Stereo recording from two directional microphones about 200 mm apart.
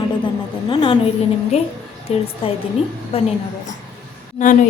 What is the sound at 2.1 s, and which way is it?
A woman's voice, 30° left (ahead or behind).